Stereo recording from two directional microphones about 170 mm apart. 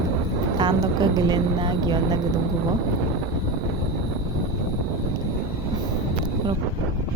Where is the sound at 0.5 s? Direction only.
25° right (ahead or behind).